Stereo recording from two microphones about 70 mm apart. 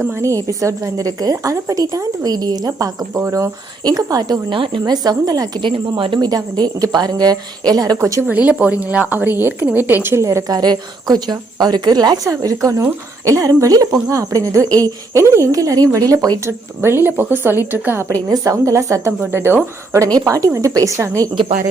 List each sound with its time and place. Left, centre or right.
0.1 s a woman's voice: right
3.8 s a woman's voice: right
7.9 s speech: right
8.3 s a woman's voice: right
10.2 s speech: right
10.5 s a woman's voice: right
12.2 s a woman's voice: right
15.2 s a woman's voice: right
16.5 s speech: right
18.1 s speech: right
19.2 s speech: right
20.2 s speech: right